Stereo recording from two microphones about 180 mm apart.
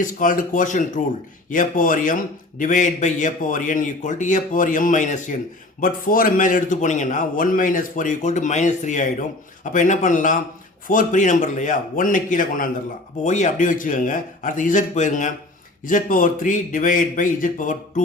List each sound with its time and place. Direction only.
0.0 s a man's voice: 45° left (ahead or behind)